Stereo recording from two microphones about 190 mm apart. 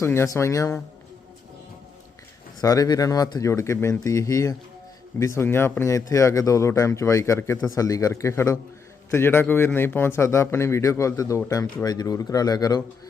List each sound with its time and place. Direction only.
0.0 s speech: 15° left (ahead or behind)
2.6 s speech: 20° left (ahead or behind)